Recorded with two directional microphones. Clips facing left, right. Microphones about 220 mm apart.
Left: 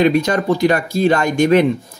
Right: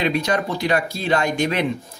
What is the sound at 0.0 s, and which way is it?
Speech, 45° left (ahead or behind).